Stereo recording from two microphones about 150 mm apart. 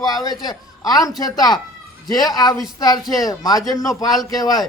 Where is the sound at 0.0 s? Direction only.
25° left (ahead or behind).